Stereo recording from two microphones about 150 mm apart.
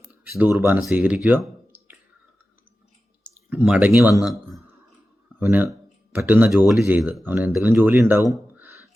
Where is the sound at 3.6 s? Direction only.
5° right (ahead or behind).